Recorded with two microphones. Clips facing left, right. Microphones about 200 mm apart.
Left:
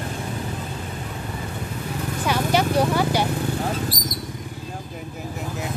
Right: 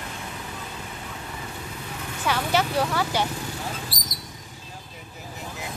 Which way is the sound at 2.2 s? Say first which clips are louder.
Left 3 dB; 15° left (ahead or behind).